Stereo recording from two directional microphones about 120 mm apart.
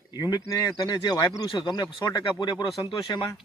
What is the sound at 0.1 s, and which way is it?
Speech, 35° left (ahead or behind).